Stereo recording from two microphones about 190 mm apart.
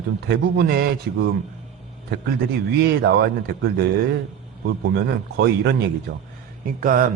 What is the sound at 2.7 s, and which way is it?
Speech, 60° right (ahead or behind).